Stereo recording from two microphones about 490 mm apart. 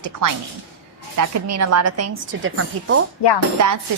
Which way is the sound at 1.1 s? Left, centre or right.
Right.